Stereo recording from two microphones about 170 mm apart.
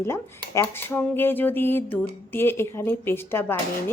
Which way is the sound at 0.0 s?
15° left (ahead or behind).